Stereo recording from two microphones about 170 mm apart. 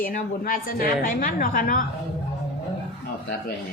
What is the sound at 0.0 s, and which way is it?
A woman's voice, 55° left (ahead or behind).